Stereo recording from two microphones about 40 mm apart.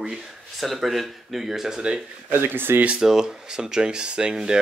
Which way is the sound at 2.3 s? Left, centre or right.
Right.